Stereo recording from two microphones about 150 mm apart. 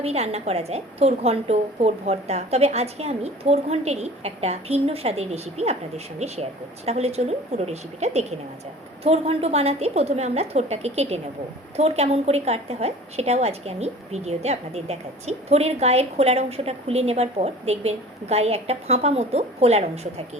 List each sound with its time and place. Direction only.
0.0 s a woman's voice: 45° right (ahead or behind)